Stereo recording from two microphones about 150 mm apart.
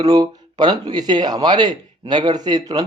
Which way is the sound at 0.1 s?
25° right (ahead or behind).